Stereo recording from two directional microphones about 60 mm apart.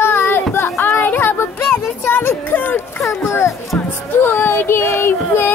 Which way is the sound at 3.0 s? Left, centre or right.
Left.